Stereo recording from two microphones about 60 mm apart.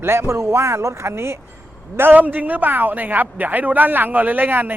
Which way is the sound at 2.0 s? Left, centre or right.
Right.